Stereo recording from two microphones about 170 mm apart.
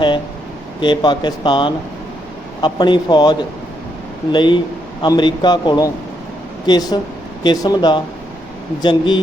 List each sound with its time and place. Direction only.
0.8 s speech: 25° left (ahead or behind)